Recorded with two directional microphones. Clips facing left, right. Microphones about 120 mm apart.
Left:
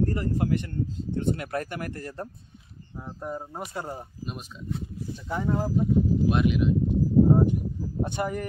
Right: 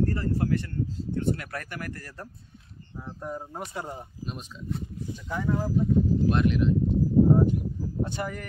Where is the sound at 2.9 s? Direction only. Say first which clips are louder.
Left 1 dB; 10° left (ahead or behind).